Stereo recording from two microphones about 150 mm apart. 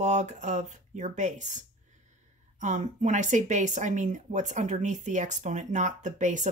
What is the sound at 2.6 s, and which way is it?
Speech, 55° right (ahead or behind).